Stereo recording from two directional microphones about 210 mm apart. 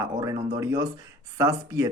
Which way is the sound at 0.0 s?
15° right (ahead or behind).